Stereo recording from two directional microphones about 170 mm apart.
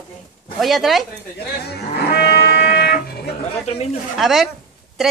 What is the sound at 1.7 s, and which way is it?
Livestock, 70° left (ahead or behind).